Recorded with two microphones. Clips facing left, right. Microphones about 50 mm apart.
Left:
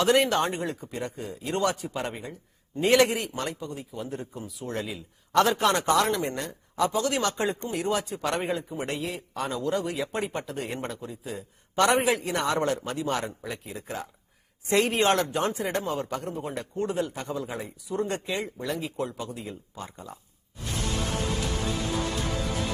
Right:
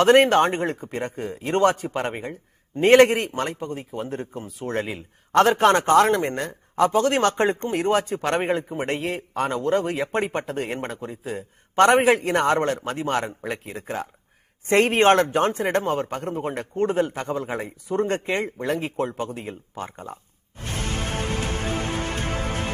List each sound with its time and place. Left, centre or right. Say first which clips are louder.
0.0 s speech: right 7 dB; right
20.6 s music: right 2 dB; right